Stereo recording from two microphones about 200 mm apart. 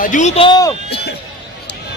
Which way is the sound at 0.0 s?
40° left (ahead or behind).